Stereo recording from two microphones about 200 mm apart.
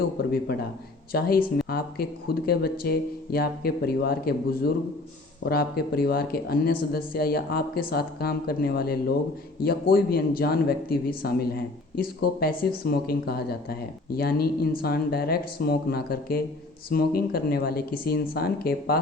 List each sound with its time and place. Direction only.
0.2 s speech: 50° left (ahead or behind)